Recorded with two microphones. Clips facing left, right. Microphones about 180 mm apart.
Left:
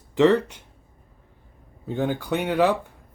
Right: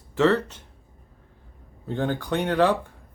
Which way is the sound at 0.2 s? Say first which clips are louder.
Left 3 dB; 15° left (ahead or behind).